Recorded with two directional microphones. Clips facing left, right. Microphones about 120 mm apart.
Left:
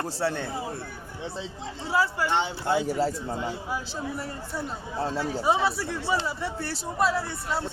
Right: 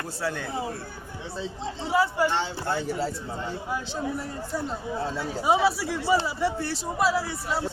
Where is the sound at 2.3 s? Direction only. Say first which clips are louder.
Left 2 dB; 15° left (ahead or behind).